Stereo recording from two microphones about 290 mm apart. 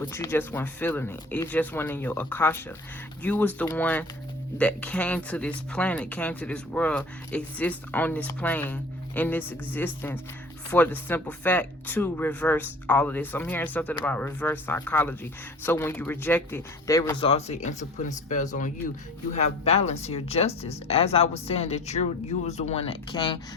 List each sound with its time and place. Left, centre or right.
0.0 s speech: centre